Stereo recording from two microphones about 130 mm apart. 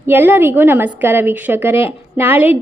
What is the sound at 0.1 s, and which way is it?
A woman's voice, 15° right (ahead or behind).